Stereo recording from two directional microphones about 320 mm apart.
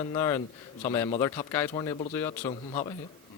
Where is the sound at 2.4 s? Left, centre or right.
Left.